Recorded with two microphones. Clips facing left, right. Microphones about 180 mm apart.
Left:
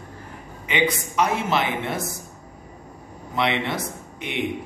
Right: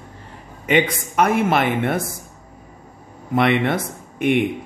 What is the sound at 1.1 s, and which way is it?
Speech, 55° right (ahead or behind).